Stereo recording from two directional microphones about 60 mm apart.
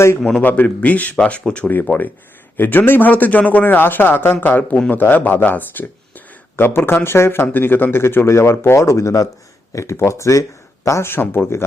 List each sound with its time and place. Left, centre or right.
0.2 s a man's voice: centre
0.4 s a man's voice: left
9.7 s speech: left
11.1 s speech: left